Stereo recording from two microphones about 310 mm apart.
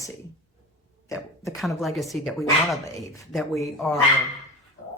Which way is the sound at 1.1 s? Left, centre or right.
Centre.